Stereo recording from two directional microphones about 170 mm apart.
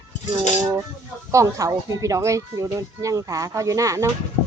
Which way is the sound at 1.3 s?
20° right (ahead or behind).